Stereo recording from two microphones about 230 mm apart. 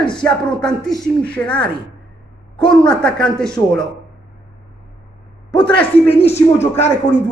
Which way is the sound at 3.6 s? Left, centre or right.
Centre.